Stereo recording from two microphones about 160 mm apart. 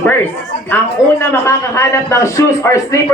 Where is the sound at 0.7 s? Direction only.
15° left (ahead or behind).